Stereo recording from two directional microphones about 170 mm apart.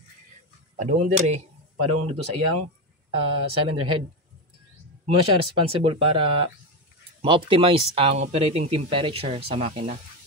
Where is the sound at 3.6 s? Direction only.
30° right (ahead or behind).